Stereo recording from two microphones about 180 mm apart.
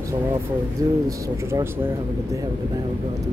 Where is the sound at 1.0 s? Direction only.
15° right (ahead or behind).